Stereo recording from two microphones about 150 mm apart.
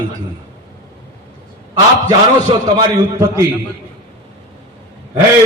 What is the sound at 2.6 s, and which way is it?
Speech, 25° right (ahead or behind).